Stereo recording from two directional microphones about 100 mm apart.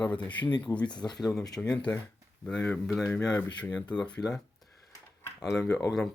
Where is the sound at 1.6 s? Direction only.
10° left (ahead or behind).